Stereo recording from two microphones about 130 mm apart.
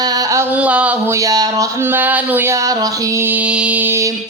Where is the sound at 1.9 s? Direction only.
15° right (ahead or behind).